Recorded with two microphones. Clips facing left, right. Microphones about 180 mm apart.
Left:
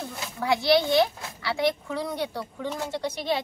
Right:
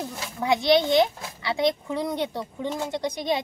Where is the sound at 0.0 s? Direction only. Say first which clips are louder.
Right 2 dB; 20° right (ahead or behind).